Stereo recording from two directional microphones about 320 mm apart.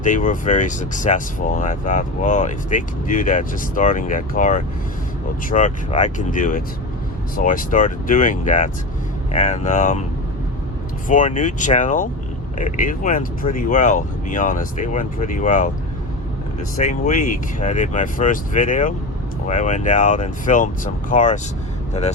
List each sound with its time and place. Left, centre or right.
0.0 s speech: left
11.1 s speech: left
16.7 s speech: left